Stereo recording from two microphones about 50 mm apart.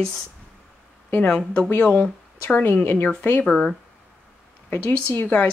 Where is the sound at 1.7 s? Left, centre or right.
Left.